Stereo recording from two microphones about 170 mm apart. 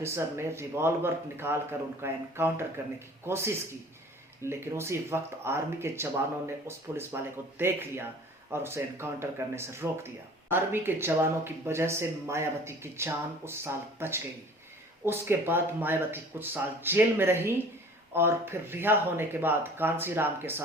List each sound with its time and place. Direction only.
0.0 s speech: 15° right (ahead or behind)